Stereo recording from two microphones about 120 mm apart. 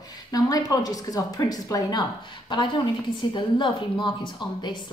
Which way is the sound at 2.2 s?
40° left (ahead or behind).